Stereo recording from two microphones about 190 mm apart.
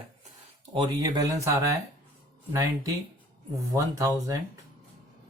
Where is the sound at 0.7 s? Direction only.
25° right (ahead or behind).